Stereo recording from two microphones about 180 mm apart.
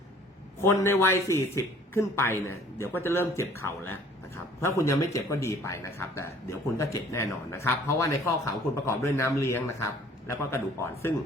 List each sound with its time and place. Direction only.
0.6 s speech: 15° left (ahead or behind)
4.6 s speech: 15° left (ahead or behind)